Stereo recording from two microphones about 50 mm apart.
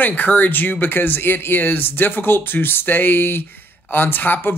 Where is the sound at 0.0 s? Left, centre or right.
Left.